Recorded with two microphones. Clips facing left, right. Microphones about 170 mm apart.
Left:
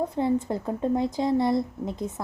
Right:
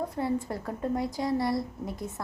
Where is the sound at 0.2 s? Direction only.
20° left (ahead or behind).